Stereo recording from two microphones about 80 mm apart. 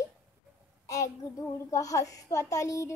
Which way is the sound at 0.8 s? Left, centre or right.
Left.